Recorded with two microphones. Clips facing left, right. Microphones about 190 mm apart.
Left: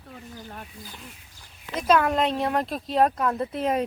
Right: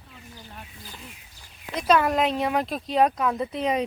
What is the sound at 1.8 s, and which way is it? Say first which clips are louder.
Speech: even; centre (ahead or behind).